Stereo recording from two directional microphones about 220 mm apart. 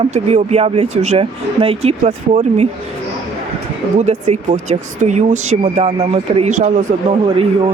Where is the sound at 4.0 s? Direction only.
30° right (ahead or behind).